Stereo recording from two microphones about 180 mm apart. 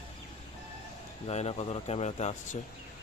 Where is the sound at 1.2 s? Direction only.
35° left (ahead or behind).